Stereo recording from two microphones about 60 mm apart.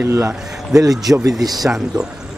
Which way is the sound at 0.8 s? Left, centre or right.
Right.